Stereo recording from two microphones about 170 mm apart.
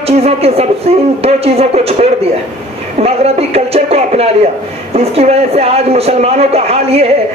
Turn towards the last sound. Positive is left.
turn(degrees=-35)  # may be behind; listen again after turning